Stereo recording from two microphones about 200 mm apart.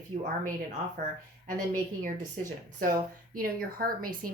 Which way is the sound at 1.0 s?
55° right (ahead or behind).